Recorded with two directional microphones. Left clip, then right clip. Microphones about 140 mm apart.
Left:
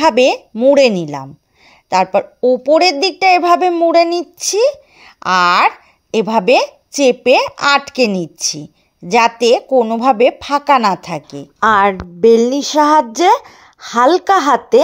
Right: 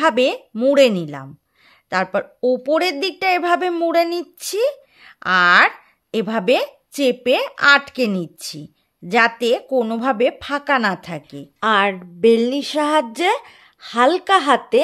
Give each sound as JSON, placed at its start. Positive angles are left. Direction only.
{"t": 0.0, "sound": "a woman's voice", "side_deg": 10}
{"t": 11.6, "sound": "a woman's voice", "side_deg": 30}